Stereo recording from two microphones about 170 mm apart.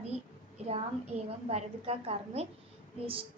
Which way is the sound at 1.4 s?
35° right (ahead or behind).